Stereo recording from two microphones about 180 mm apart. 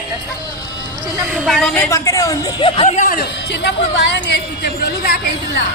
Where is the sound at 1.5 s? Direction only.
Centre (ahead or behind).